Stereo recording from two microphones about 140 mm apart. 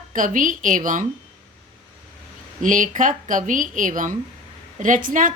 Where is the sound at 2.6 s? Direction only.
70° right (ahead or behind).